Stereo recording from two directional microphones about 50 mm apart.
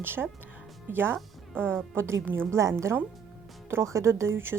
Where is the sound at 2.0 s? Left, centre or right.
Right.